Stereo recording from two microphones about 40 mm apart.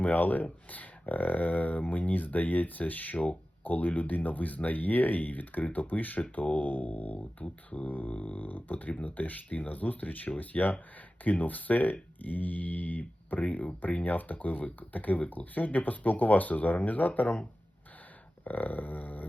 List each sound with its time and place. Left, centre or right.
0.0 s speech: left
7.9 s speech: left
8.1 s a sound: left
8.4 s speech: left
18.4 s speech: left